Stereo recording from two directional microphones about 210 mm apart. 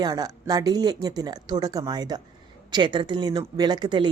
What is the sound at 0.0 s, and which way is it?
Speech, 20° right (ahead or behind).